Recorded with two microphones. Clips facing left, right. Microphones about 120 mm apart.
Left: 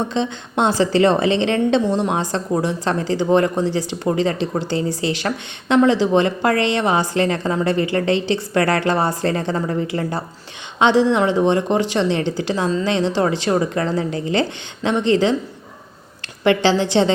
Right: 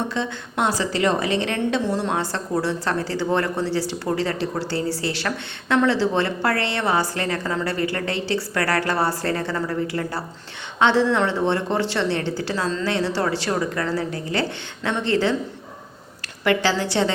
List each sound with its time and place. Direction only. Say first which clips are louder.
0.1 s a woman's voice: left 5 dB; 25° left (ahead or behind)
16.4 s a woman's voice: left 5 dB; 25° left (ahead or behind)